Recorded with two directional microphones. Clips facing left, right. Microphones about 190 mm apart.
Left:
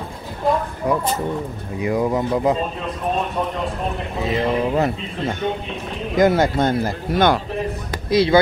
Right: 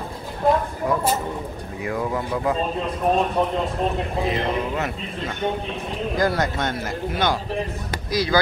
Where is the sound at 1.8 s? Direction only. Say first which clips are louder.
Left 6 dB; 20° left (ahead or behind).